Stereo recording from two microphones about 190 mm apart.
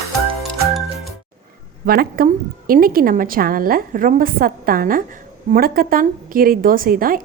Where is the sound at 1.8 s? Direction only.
50° right (ahead or behind).